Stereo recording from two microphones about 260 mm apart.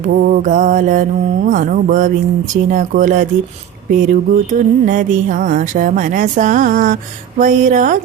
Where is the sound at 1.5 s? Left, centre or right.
Right.